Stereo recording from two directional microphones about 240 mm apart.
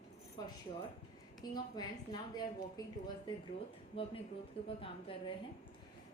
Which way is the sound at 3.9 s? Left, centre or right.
Left.